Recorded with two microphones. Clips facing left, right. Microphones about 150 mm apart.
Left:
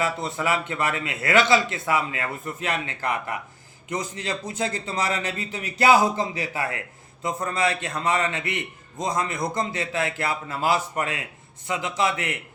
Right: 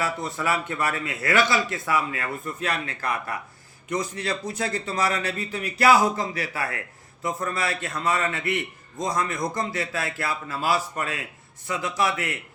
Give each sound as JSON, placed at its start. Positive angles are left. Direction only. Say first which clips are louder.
{"t": 0.0, "sound": "a man's voice", "louder": "left 2 dB", "side_deg": 25}